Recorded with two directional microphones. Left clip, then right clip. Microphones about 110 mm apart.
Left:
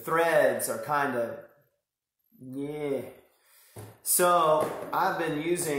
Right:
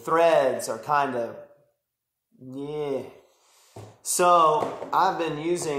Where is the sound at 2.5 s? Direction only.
15° right (ahead or behind).